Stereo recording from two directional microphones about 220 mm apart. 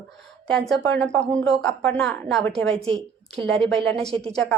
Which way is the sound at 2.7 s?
25° right (ahead or behind).